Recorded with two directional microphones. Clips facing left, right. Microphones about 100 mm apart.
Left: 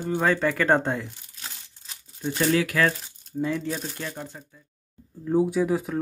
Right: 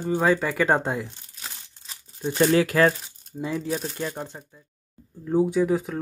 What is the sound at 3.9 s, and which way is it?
Speech, 25° right (ahead or behind).